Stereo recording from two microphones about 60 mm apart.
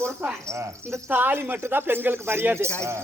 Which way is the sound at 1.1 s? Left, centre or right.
Right.